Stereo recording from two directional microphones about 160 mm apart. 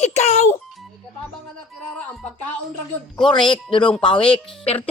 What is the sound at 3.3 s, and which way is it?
A child's voice, 30° left (ahead or behind).